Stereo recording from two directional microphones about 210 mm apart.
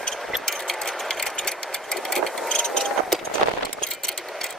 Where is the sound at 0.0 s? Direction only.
Centre (ahead or behind).